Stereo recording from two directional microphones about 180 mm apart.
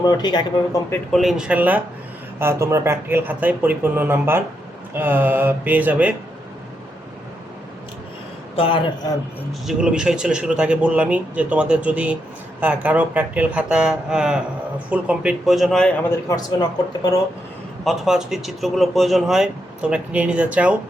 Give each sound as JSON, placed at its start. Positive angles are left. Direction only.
{"t": 0.0, "sound": "speech", "side_deg": 25}
{"t": 1.1, "sound": "speech", "side_deg": 0}
{"t": 8.5, "sound": "a man's voice", "side_deg": 30}
{"t": 9.5, "sound": "speech", "side_deg": -5}
{"t": 16.0, "sound": "speech", "side_deg": 20}
{"t": 17.8, "sound": "speech", "side_deg": -5}